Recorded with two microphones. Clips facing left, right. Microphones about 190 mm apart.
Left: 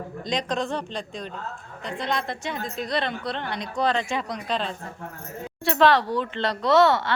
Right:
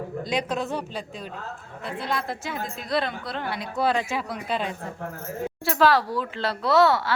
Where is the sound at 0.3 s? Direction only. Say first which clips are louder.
Left 1 dB; 5° right (ahead or behind).